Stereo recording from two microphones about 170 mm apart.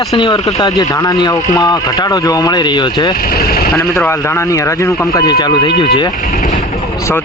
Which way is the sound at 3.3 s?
65° left (ahead or behind).